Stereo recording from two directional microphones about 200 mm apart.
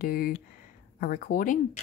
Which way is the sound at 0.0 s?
45° left (ahead or behind).